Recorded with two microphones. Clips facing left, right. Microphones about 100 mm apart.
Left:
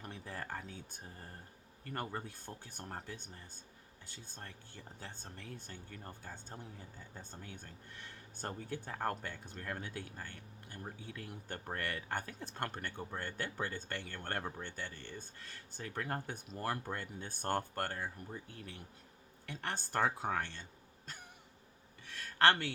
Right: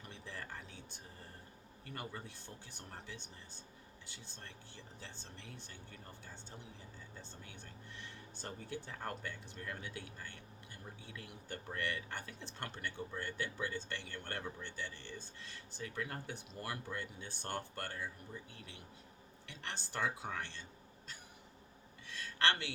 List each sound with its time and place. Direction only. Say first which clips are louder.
0.0 s speech: left 4 dB; 45° left (ahead or behind)
22.4 s speech: left 6 dB; 50° left (ahead or behind)